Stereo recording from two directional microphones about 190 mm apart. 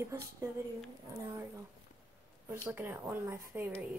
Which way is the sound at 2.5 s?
10° right (ahead or behind).